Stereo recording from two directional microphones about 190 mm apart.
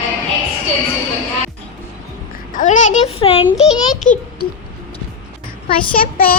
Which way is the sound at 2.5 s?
40° left (ahead or behind).